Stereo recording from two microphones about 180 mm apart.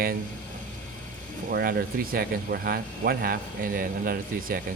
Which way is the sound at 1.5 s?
55° right (ahead or behind).